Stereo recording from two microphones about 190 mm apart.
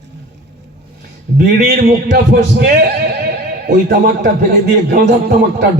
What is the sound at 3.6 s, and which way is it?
A man's voice, 55° right (ahead or behind).